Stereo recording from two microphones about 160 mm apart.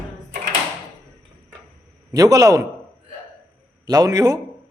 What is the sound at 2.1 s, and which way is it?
Speech, 20° right (ahead or behind).